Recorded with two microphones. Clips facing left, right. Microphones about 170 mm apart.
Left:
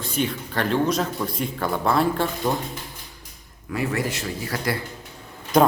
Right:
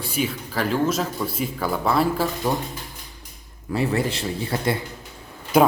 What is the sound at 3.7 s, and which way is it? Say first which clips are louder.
A man's voice: right 3 dB; 30° right (ahead or behind).